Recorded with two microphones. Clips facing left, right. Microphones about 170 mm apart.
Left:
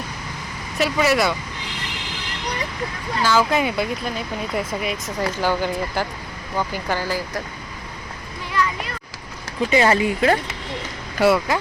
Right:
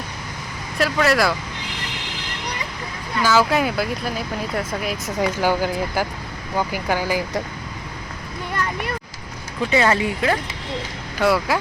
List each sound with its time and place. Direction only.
0.8 s speech: 5° left (ahead or behind)
3.2 s speech: 5° right (ahead or behind)
5.2 s speech: 10° right (ahead or behind)
8.5 s a sound: 50° right (ahead or behind)
9.8 s speech: 30° left (ahead or behind)
11.2 s speech: centre (ahead or behind)